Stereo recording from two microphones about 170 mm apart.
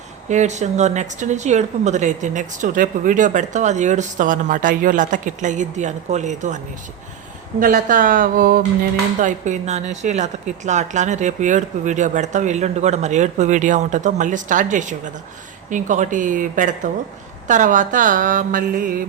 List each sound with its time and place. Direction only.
0.3 s a woman's voice: 45° right (ahead or behind)
7.6 s a woman's voice: 55° right (ahead or behind)